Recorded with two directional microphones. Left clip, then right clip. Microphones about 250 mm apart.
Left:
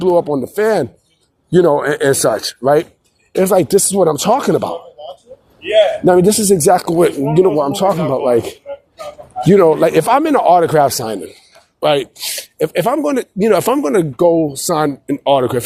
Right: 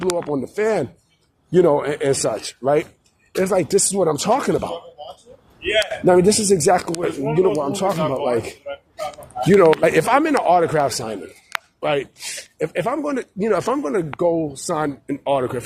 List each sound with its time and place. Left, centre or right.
0.0 s speech: left
5.5 s a sound: right
6.1 s speech: left